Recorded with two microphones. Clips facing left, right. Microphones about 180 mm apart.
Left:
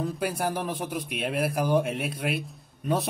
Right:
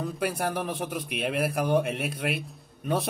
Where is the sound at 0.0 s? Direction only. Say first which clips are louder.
Left 1 dB; centre (ahead or behind).